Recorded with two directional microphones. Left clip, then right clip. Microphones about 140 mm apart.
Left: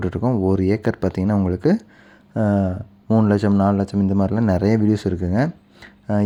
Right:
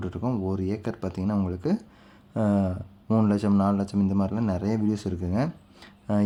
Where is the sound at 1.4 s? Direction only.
40° left (ahead or behind).